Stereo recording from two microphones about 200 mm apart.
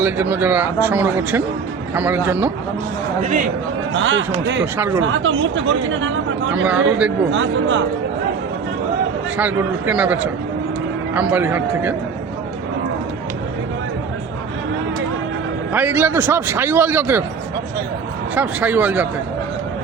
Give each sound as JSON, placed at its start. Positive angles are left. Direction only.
{"t": 0.0, "sound": "a man's voice", "side_deg": -10}
{"t": 3.9, "sound": "speech", "side_deg": -70}
{"t": 4.6, "sound": "a man's voice", "side_deg": -10}
{"t": 4.9, "sound": "speech", "side_deg": -75}
{"t": 6.5, "sound": "a man's voice", "side_deg": -5}
{"t": 7.3, "sound": "speech", "side_deg": -70}
{"t": 9.4, "sound": "a man's voice", "side_deg": -10}
{"t": 15.7, "sound": "a man's voice", "side_deg": -10}
{"t": 18.3, "sound": "a man's voice", "side_deg": -10}